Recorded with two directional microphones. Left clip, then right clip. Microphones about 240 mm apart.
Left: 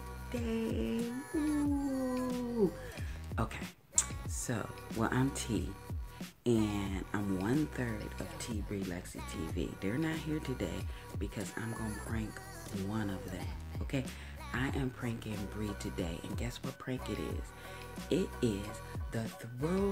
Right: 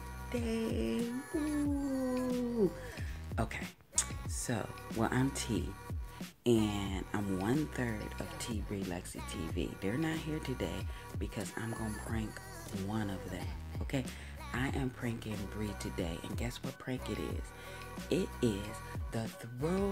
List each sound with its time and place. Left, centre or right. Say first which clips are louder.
0.3 s music: right 1 dB; centre
3.3 s speech: right 1 dB; centre